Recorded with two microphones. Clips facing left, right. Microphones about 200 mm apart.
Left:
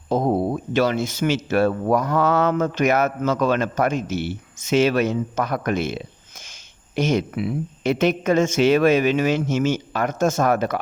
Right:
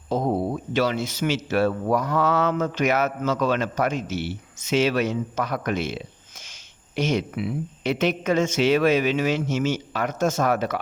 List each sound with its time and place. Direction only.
0.1 s speech: 50° left (ahead or behind)